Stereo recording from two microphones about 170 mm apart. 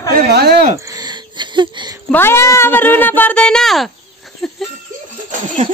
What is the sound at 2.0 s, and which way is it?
Speech, 15° left (ahead or behind).